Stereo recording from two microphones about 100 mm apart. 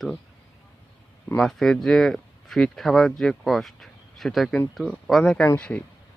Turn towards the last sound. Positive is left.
turn(degrees=15)  # may be behind; listen again after turning